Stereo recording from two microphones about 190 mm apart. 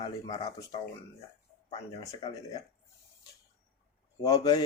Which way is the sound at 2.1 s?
20° left (ahead or behind).